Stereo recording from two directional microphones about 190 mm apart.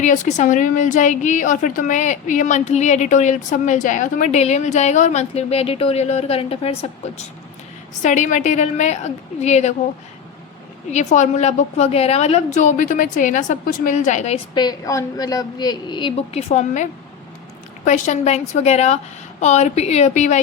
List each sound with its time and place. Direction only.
0.0 s a woman's voice: 40° left (ahead or behind)
8.0 s a woman's voice: 40° left (ahead or behind)
10.9 s a woman's voice: 40° left (ahead or behind)
14.5 s a woman's voice: 20° left (ahead or behind); by 20.4 s 40° left (ahead or behind)